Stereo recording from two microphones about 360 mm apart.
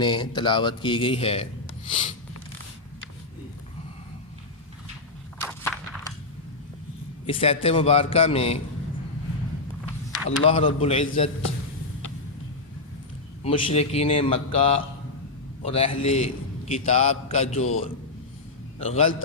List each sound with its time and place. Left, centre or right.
0.0 s speech: centre
1.9 s a sound: centre
5.4 s walk: centre
7.3 s speech: centre
10.2 s speech: centre
13.4 s speech: centre
18.8 s a man's voice: centre